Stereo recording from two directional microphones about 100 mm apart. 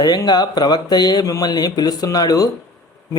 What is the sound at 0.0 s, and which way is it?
A man's voice, 45° left (ahead or behind).